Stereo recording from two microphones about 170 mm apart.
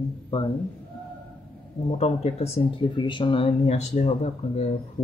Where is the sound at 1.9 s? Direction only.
40° left (ahead or behind).